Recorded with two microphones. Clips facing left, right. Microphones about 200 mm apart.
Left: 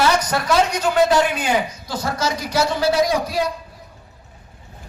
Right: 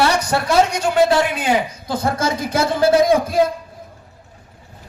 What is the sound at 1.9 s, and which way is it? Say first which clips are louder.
A man's voice: right 3 dB; 55° right (ahead or behind).